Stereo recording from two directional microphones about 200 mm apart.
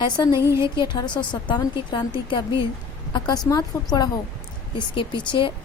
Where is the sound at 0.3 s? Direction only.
15° right (ahead or behind).